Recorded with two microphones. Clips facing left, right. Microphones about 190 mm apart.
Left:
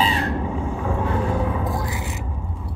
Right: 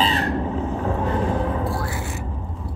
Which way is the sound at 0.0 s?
10° left (ahead or behind).